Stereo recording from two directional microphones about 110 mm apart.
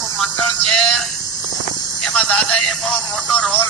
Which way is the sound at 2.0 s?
5° left (ahead or behind).